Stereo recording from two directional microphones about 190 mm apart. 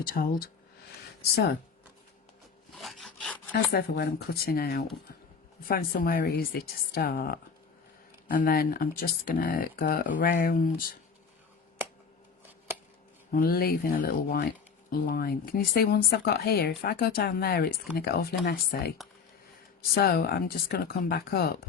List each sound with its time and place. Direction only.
0.0 s speech: 50° left (ahead or behind)
2.7 s rub: centre (ahead or behind)
3.5 s speech: 55° left (ahead or behind)
11.8 s a sound: 10° right (ahead or behind)
13.3 s speech: 50° left (ahead or behind)